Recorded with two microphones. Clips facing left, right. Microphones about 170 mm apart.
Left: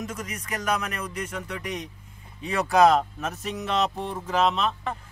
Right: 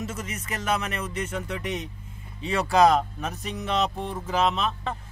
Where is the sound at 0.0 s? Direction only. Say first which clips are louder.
Even; 5° right (ahead or behind).